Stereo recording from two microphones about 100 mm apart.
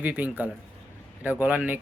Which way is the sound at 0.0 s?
15° right (ahead or behind).